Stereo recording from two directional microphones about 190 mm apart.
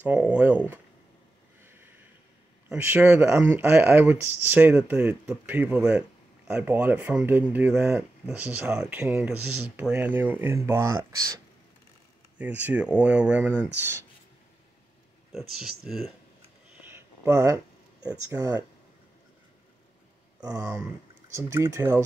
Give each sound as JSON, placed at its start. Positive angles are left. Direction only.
{"t": 0.0, "sound": "speech", "side_deg": -5}
{"t": 1.6, "sound": "a sound", "side_deg": -10}
{"t": 2.7, "sound": "speech", "side_deg": -10}
{"t": 15.3, "sound": "speech", "side_deg": 0}
{"t": 16.9, "sound": "a sound", "side_deg": -15}
{"t": 18.3, "sound": "speech", "side_deg": -15}
{"t": 20.3, "sound": "speech", "side_deg": -20}